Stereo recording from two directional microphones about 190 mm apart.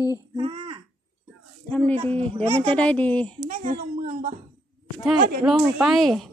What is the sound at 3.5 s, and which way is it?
Speech, 40° right (ahead or behind).